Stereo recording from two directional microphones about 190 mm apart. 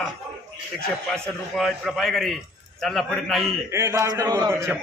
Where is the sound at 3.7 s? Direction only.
15° right (ahead or behind).